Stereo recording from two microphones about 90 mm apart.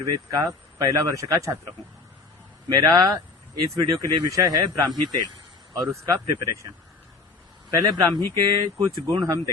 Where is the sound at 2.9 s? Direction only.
40° right (ahead or behind).